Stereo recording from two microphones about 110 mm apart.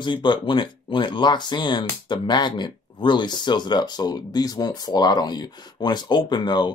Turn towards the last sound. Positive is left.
turn(degrees=40)  # may be behind; listen again after turning